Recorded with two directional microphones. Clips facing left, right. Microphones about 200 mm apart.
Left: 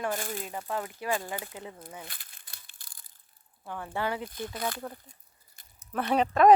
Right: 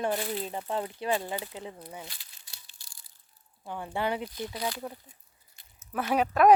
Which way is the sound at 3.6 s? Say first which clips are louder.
Right 1 dB; 15° right (ahead or behind).